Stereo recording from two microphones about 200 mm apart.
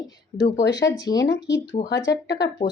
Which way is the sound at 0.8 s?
20° left (ahead or behind).